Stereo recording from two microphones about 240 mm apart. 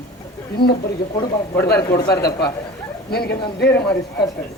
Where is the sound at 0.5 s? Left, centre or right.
Left.